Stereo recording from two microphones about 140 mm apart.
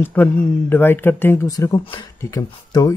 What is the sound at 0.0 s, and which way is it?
Speech, 15° left (ahead or behind).